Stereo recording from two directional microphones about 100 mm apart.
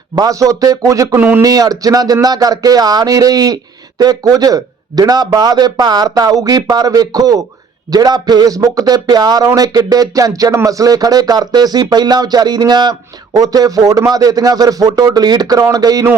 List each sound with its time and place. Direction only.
0.2 s speech: 35° right (ahead or behind)